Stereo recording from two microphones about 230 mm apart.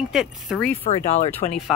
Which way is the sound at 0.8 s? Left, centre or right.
Left.